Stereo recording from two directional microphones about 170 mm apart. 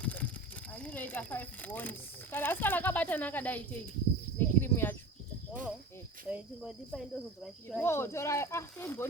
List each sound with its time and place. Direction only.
0.0 s a sound: 10° left (ahead or behind)
0.7 s speech: 10° left (ahead or behind)
4.4 s cricket: 10° left (ahead or behind)
6.2 s speech: 5° right (ahead or behind)
7.8 s speech: 15° left (ahead or behind)